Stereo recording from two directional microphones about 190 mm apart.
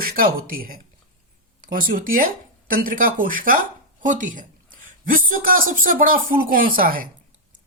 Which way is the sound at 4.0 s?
45° right (ahead or behind).